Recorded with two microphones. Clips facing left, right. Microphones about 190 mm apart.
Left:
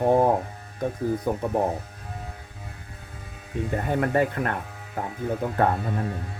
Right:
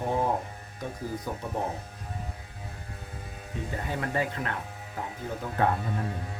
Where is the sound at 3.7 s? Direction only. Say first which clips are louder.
Left 8 dB; 50° left (ahead or behind).